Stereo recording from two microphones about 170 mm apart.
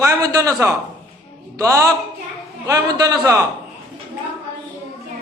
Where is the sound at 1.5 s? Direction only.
20° right (ahead or behind).